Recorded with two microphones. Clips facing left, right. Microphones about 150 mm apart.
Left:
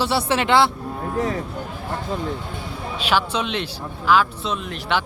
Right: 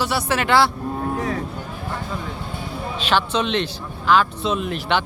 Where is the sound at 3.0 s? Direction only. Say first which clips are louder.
Right 1 dB; 10° left (ahead or behind).